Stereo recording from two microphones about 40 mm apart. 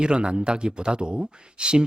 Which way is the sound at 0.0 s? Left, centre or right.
Right.